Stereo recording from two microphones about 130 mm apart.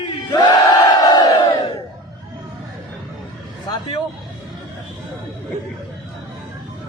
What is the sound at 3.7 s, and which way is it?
Speech, 30° left (ahead or behind).